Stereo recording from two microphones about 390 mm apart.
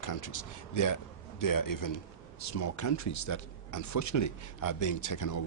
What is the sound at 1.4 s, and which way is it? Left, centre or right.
A man's voice, left.